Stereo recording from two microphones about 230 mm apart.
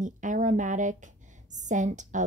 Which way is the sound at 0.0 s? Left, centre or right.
Right.